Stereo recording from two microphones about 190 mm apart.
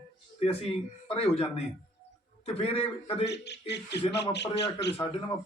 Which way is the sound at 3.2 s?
65° left (ahead or behind).